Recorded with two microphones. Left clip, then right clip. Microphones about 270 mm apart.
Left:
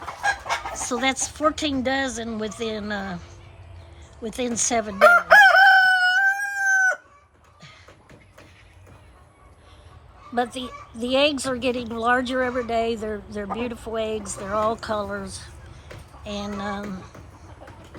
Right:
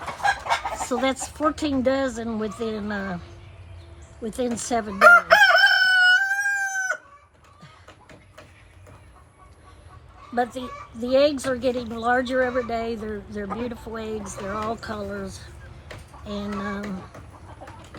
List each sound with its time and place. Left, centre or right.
0.9 s a woman's voice: centre
4.2 s a woman's voice: centre
4.9 s crowing: left
10.3 s a child's voice: centre
14.8 s speech: centre
16.3 s a woman's voice: centre